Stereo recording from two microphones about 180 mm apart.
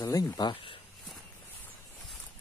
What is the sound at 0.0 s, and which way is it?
Speech, 20° left (ahead or behind).